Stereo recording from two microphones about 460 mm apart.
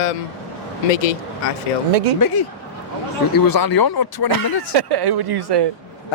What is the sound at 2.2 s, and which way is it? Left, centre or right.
Speech, left.